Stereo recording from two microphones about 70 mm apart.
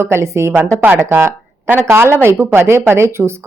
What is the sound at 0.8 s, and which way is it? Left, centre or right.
A woman's voice, right.